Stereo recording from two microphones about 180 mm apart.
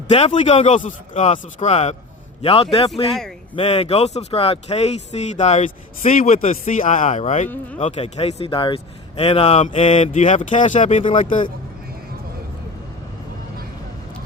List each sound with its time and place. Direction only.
0.1 s speech: 30° left (ahead or behind)
0.3 s speech: 40° left (ahead or behind)
2.9 s speech: centre (ahead or behind)
3.5 s speech: 35° left (ahead or behind)